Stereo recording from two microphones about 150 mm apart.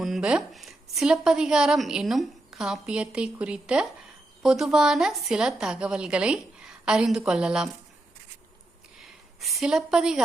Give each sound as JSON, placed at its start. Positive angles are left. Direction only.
{"t": 0.0, "sound": "a woman's voice", "side_deg": -5}
{"t": 9.4, "sound": "a woman's voice", "side_deg": 0}